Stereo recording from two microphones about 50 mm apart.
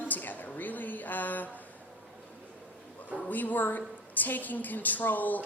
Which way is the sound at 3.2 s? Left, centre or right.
Left.